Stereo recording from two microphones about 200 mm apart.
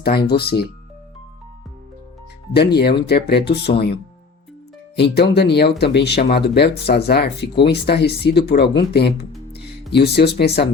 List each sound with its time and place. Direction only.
0.3 s speech: 55° left (ahead or behind)
2.5 s speech: 55° left (ahead or behind)